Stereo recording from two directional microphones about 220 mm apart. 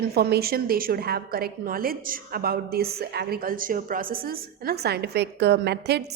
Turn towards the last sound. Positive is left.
turn(degrees=-50)  # may be behind; listen again after turning